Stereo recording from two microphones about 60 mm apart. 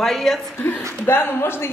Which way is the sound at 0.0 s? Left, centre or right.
Centre.